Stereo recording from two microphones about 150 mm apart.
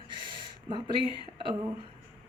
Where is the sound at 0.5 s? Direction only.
30° right (ahead or behind).